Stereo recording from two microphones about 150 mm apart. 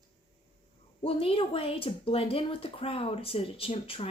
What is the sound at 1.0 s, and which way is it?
Speech, 40° left (ahead or behind).